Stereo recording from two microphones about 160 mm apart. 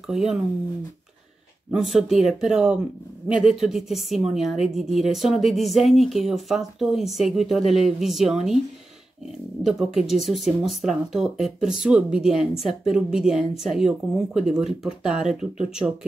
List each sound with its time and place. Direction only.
0.0 s a woman's voice: 5° right (ahead or behind)
1.7 s a woman's voice: 5° right (ahead or behind)
9.7 s a woman's voice: 5° right (ahead or behind)